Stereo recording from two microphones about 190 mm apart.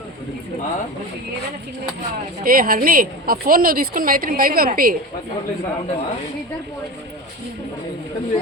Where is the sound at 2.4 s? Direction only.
50° right (ahead or behind).